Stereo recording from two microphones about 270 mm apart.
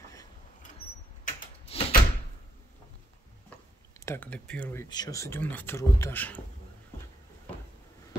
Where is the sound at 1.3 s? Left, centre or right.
Left.